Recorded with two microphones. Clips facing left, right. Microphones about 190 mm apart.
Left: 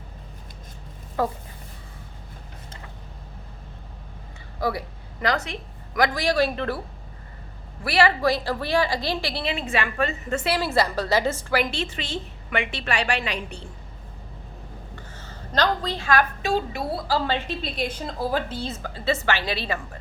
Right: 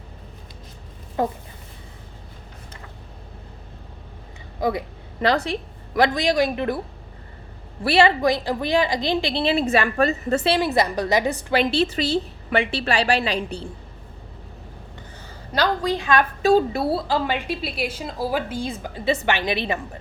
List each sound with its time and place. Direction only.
1.2 s a woman's voice: 20° right (ahead or behind)
4.6 s a woman's voice: 20° right (ahead or behind)
7.9 s a woman's voice: 25° right (ahead or behind)
10.6 s a woman's voice: 20° right (ahead or behind)
15.2 s a woman's voice: 10° right (ahead or behind)
16.4 s a woman's voice: 40° right (ahead or behind)
17.1 s a woman's voice: 15° right (ahead or behind)